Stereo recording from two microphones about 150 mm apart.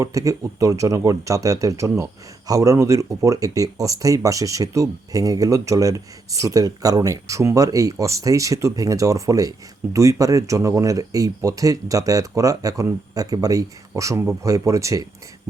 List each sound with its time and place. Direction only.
0.0 s speech: 20° right (ahead or behind)